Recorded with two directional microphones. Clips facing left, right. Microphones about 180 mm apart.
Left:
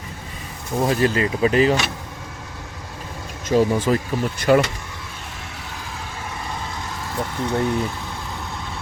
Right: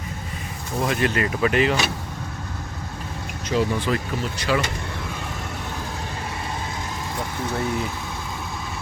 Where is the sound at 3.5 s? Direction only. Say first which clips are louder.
Left 5 dB; 45° left (ahead or behind).